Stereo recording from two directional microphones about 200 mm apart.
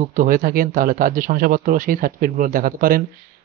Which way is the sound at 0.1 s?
45° right (ahead or behind).